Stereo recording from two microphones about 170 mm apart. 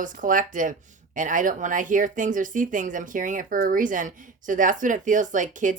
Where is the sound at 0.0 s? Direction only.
50° right (ahead or behind).